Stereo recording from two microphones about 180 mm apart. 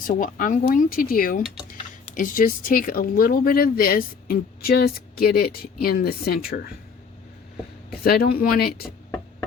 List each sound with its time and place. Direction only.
0.0 s speech: 50° left (ahead or behind)
8.0 s speech: 55° left (ahead or behind)